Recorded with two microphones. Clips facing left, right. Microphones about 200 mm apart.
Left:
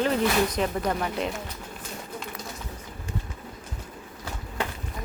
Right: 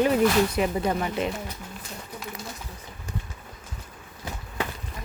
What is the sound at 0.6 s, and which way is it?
Speech, 5° right (ahead or behind).